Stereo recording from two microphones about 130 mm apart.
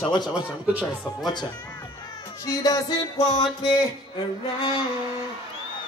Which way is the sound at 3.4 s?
35° left (ahead or behind).